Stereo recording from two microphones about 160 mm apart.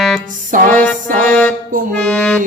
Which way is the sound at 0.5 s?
55° right (ahead or behind).